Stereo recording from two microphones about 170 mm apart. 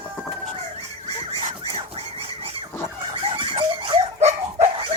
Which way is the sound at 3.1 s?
30° right (ahead or behind).